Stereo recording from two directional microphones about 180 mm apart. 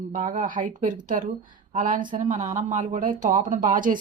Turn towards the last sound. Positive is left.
turn(degrees=-50)  # may be behind; listen again after turning